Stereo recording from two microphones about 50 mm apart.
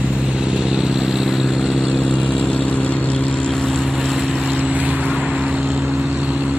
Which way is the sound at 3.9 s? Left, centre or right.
Centre.